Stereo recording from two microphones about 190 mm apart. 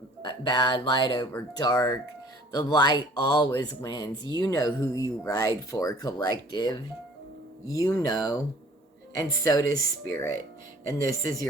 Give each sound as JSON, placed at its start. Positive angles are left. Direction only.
{"t": 0.2, "sound": "speech", "side_deg": 25}